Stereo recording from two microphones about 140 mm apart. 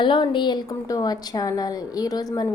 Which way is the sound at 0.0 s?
35° left (ahead or behind).